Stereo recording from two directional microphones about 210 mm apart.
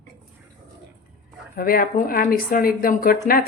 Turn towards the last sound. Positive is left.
turn(degrees=45)  # may be behind; listen again after turning